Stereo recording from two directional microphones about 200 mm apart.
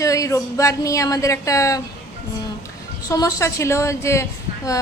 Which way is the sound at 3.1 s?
15° left (ahead or behind).